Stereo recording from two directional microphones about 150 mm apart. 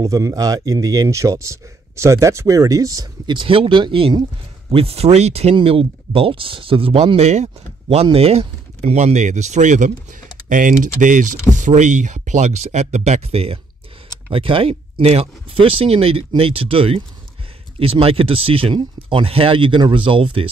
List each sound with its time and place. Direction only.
0.0 s speech: 20° right (ahead or behind)